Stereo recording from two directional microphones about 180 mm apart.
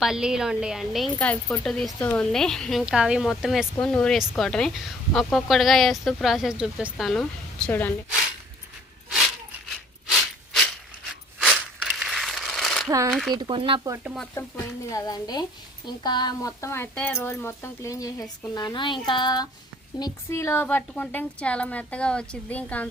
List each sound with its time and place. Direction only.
0.0 s a woman's voice: 5° right (ahead or behind)
10.1 s a sound: centre (ahead or behind)
13.3 s speech: 25° right (ahead or behind)
14.0 s a woman's voice: 5° right (ahead or behind)
14.3 s a woman's voice: 15° left (ahead or behind)